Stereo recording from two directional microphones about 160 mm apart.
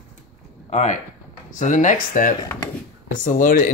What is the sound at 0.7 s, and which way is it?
Speech, 45° left (ahead or behind).